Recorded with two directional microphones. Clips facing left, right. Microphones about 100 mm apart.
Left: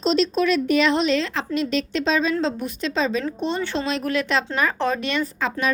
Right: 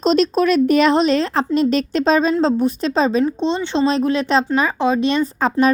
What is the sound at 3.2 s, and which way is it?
Speech, 25° right (ahead or behind).